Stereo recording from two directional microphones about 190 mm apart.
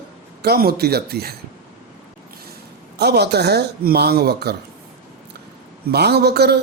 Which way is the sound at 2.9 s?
60° right (ahead or behind).